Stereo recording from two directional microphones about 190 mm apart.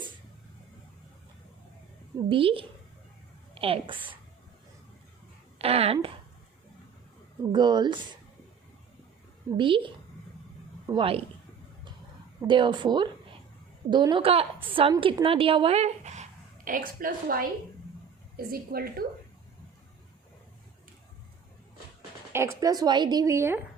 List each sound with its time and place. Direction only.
2.1 s a woman's voice: 30° right (ahead or behind)
5.5 s speech: 30° right (ahead or behind)
7.5 s a woman's voice: 25° right (ahead or behind)
9.5 s a woman's voice: 25° right (ahead or behind)
12.5 s a woman's voice: 25° right (ahead or behind)
16.6 s a woman's voice: 45° right (ahead or behind)
22.3 s speech: 15° right (ahead or behind)